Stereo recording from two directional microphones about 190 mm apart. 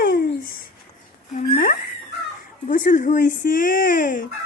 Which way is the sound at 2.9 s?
40° left (ahead or behind).